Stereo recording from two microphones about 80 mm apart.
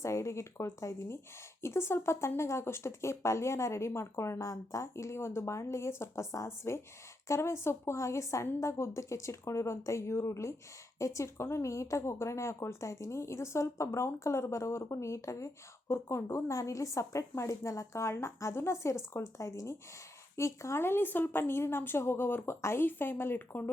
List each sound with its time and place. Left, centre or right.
0.0 s a woman's voice: left